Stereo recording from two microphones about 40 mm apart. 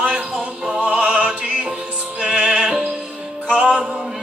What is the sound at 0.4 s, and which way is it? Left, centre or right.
Music, centre.